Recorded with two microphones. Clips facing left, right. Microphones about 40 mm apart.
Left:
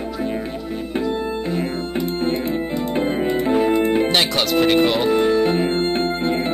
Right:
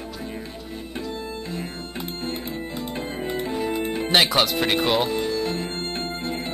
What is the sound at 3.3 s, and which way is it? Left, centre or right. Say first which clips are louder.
Music: left 8 dB; left.